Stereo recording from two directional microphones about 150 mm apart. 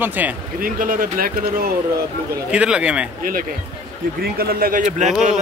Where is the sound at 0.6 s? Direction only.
65° right (ahead or behind).